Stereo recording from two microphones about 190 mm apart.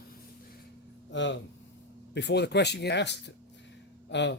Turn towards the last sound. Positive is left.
turn(degrees=70)  # may be behind; listen again after turning